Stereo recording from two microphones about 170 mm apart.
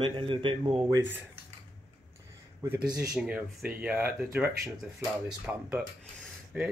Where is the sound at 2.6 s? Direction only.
15° right (ahead or behind).